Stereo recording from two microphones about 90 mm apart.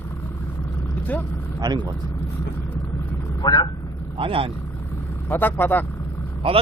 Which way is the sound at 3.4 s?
50° left (ahead or behind).